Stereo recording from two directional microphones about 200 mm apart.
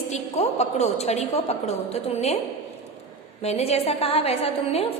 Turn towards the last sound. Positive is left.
turn(degrees=30)  # may be behind; listen again after turning